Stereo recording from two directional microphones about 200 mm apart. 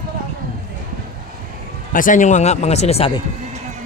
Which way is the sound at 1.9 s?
40° left (ahead or behind).